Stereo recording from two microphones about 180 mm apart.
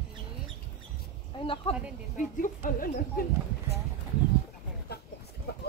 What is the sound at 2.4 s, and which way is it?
Speech, 50° left (ahead or behind).